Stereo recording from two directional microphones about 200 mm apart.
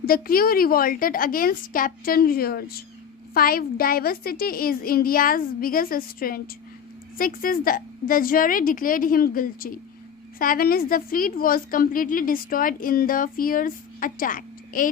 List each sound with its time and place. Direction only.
0.0 s a woman's voice: 45° left (ahead or behind)